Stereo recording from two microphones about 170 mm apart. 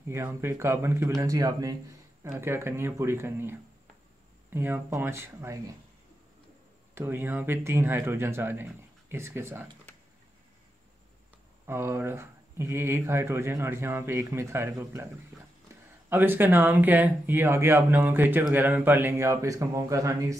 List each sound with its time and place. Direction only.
0.1 s speech: 15° right (ahead or behind)
7.0 s speech: 15° right (ahead or behind)
11.6 s speech: 15° right (ahead or behind)